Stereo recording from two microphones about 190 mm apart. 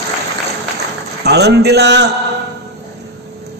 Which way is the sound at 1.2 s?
60° right (ahead or behind).